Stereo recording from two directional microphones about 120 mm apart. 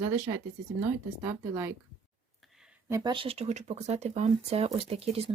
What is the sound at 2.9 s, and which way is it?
Speech, 40° right (ahead or behind).